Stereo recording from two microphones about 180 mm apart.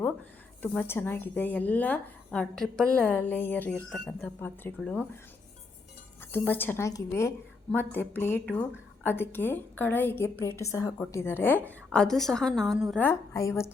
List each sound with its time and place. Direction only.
0.6 s a woman's voice: 10° left (ahead or behind)
6.3 s a woman's voice: 10° left (ahead or behind)
13.0 s a woman's voice: 15° left (ahead or behind)